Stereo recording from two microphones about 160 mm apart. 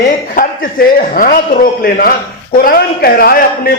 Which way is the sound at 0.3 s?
60° left (ahead or behind).